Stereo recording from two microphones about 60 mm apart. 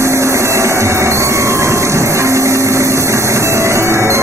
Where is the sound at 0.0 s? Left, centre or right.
Right.